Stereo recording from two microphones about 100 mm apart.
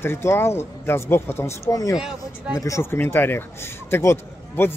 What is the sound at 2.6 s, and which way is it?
A man's voice, 30° left (ahead or behind).